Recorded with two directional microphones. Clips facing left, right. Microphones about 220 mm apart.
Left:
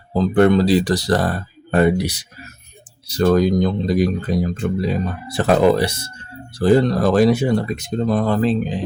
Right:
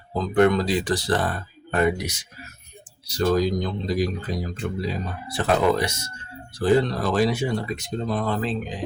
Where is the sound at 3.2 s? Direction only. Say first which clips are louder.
Left 6 dB; 55° left (ahead or behind).